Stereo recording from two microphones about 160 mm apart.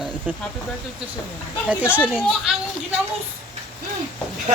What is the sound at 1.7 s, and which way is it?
Speech, 10° right (ahead or behind).